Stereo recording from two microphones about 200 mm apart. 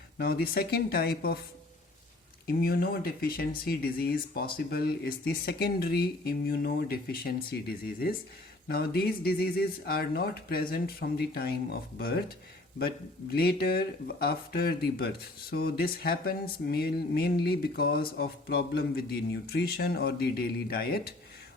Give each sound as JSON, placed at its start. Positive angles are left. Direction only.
{"t": 0.2, "sound": "speech", "side_deg": 50}
{"t": 2.5, "sound": "speech", "side_deg": 50}
{"t": 13.3, "sound": "speech", "side_deg": 50}